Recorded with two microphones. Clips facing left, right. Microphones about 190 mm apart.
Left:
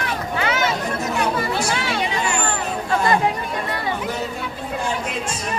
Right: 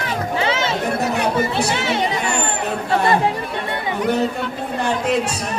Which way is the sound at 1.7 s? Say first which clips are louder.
Right 3 dB; 25° right (ahead or behind).